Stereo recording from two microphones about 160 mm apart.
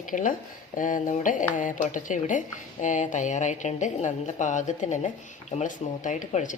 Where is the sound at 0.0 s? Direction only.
55° left (ahead or behind).